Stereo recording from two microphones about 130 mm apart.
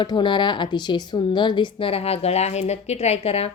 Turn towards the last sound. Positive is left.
turn(degrees=50)  # may be behind; listen again after turning